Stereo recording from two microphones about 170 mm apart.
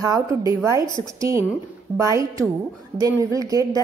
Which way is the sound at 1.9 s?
20° right (ahead or behind).